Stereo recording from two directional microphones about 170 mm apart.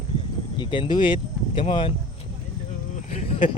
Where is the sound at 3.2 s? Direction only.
40° left (ahead or behind).